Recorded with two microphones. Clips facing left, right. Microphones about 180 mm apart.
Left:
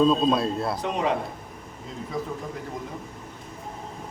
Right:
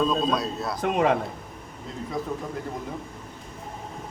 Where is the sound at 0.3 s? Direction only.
25° left (ahead or behind).